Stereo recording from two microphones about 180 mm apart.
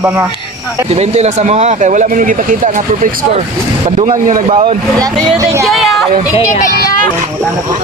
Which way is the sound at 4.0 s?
45° right (ahead or behind).